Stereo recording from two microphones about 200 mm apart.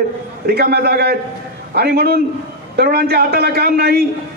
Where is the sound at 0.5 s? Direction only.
50° right (ahead or behind).